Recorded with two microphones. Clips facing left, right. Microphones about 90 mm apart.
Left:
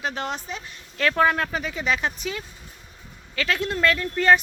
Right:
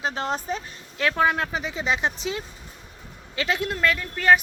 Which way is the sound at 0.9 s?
10° right (ahead or behind).